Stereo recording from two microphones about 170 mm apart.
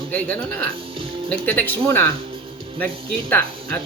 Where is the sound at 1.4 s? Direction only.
10° left (ahead or behind).